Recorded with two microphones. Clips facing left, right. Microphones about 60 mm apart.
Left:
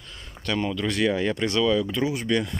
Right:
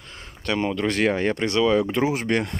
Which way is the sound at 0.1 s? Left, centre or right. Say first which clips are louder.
Right 1 dB; right.